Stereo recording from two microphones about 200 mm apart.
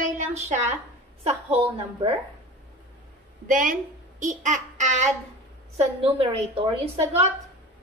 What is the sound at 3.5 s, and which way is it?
A woman's voice, 40° right (ahead or behind).